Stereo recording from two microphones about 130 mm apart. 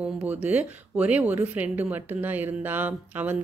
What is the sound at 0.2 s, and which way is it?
Speech, 10° right (ahead or behind).